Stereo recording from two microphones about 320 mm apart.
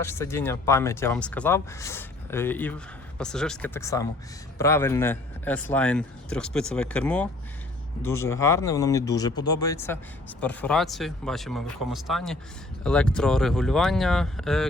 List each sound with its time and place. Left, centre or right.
0.0 s speech: centre